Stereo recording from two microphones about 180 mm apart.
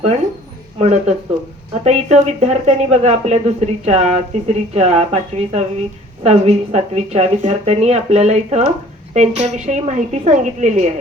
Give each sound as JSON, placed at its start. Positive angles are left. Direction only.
{"t": 0.8, "sound": "speech", "side_deg": -40}